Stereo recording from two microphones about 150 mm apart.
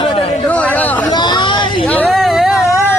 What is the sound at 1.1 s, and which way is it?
Speech, 30° left (ahead or behind).